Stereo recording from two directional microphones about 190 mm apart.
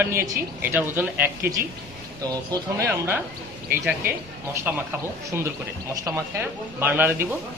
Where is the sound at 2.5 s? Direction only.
15° right (ahead or behind).